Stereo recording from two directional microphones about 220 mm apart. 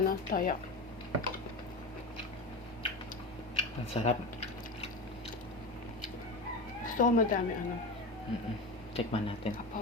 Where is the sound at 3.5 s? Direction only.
30° left (ahead or behind).